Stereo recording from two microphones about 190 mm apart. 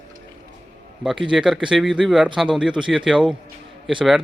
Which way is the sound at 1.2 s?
5° right (ahead or behind).